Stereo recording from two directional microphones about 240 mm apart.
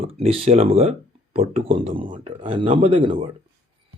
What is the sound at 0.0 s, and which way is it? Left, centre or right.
Speech, right.